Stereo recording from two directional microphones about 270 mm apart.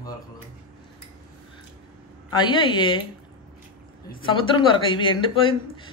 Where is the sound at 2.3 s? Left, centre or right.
Centre.